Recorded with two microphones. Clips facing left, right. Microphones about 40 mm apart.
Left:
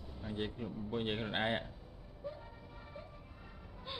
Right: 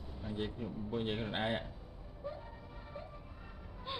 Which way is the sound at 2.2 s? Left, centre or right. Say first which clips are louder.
Right 1 dB; centre.